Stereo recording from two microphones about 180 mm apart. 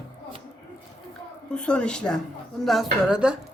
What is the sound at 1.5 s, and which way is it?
A woman's voice, 5° left (ahead or behind).